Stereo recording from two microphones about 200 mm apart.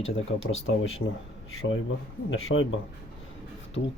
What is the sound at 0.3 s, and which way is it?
Speech, 75° left (ahead or behind).